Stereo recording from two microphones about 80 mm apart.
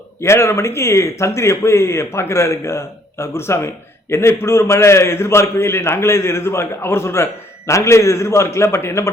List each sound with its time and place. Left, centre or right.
0.2 s speech: left